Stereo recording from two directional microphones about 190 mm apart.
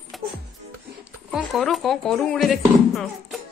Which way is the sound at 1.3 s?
Centre (ahead or behind).